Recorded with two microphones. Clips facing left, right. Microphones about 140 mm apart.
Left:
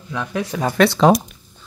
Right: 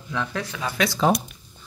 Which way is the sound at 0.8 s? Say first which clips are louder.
Left 8 dB; 75° left (ahead or behind).